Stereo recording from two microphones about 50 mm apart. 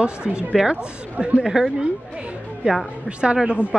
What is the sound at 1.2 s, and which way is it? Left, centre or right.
Speech, centre.